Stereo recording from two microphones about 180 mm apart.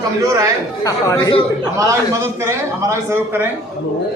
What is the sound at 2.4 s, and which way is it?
A man's voice, 15° right (ahead or behind).